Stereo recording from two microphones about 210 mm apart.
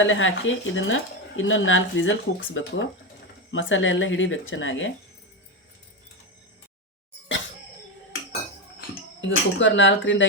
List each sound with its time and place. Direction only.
0.0 s speech: 65° left (ahead or behind)
9.2 s speech: 60° left (ahead or behind)